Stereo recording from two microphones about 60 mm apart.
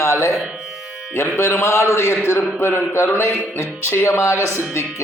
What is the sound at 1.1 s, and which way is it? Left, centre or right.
Speech, left.